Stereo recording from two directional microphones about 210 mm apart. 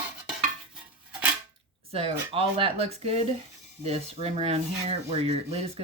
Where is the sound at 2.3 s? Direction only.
25° right (ahead or behind).